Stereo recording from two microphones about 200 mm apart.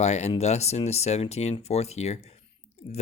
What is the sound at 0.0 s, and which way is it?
Speech, 35° left (ahead or behind).